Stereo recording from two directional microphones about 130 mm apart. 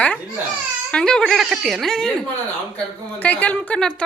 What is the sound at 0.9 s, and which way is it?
A woman's voice, 5° left (ahead or behind).